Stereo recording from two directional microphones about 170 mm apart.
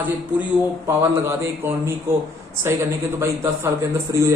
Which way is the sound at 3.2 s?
15° right (ahead or behind).